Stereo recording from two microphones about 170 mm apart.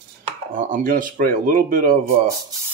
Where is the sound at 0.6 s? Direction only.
50° right (ahead or behind).